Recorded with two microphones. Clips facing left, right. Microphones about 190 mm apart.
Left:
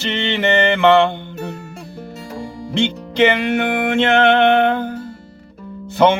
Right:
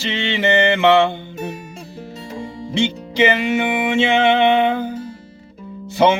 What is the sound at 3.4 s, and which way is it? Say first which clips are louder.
Music: left 1 dB; 60° left (ahead or behind).